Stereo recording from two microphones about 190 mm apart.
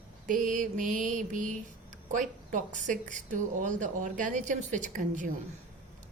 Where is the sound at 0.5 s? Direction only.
45° right (ahead or behind).